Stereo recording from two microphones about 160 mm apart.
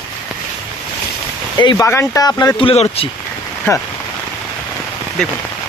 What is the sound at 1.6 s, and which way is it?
Speech, 30° left (ahead or behind).